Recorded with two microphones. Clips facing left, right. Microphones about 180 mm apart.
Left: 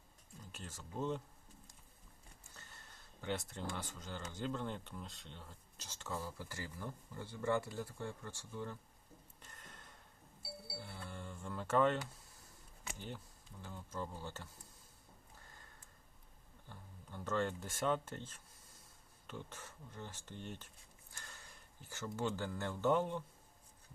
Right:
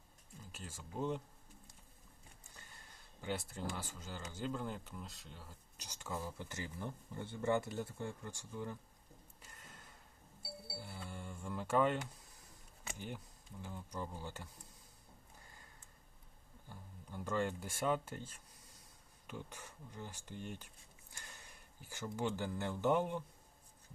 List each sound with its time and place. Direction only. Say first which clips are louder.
0.5 s speech: even; 10° right (ahead or behind)
2.6 s speech: left 1 dB; 10° right (ahead or behind)
9.4 s a sound: even; 5° right (ahead or behind)
10.8 s music: right 1 dB; 10° right (ahead or behind)
13.0 s speech: right 2 dB; 15° right (ahead or behind)
16.6 s speech: right 2 dB; 10° right (ahead or behind)